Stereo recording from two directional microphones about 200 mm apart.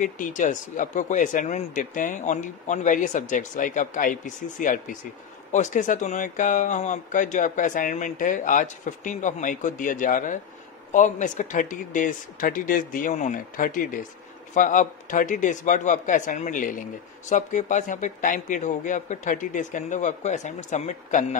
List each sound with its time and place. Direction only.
0.0 s speech: 40° left (ahead or behind)